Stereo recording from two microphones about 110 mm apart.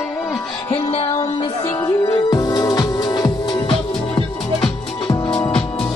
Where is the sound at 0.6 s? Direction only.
50° left (ahead or behind).